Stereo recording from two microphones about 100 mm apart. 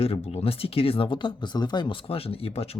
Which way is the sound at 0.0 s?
90° left.